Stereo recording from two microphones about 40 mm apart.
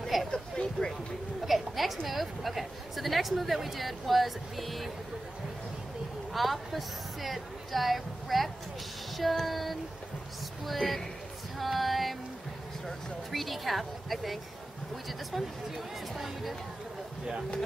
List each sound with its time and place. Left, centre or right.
0.0 s vehicle: centre
0.3 s vehicle: centre
1.4 s a sound: centre
2.0 s a woman's voice: centre
6.3 s a woman's voice: centre
10.8 s speech: centre
11.5 s female singing: centre
12.8 s a woman's voice: centre